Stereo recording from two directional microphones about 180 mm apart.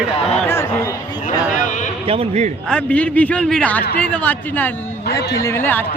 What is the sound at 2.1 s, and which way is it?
Speech, 35° right (ahead or behind).